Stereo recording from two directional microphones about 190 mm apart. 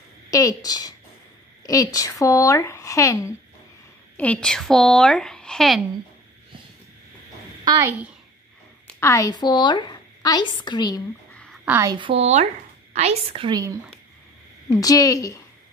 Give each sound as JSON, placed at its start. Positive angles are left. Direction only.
{"t": 0.3, "sound": "a woman's voice", "side_deg": 20}
{"t": 4.2, "sound": "speech", "side_deg": 5}
{"t": 7.6, "sound": "a child's voice", "side_deg": -20}
{"t": 9.0, "sound": "a woman's voice", "side_deg": 15}
{"t": 11.3, "sound": "a sound", "side_deg": 5}
{"t": 11.6, "sound": "a woman's voice", "side_deg": -10}
{"t": 11.9, "sound": "a woman's voice", "side_deg": -25}
{"t": 14.7, "sound": "speech", "side_deg": 20}